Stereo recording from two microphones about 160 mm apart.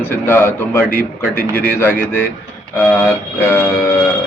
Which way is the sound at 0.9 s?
70° left (ahead or behind).